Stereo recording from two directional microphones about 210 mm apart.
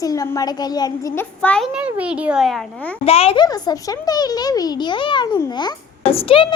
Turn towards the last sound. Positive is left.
turn(degrees=25)  # may be behind; listen again after turning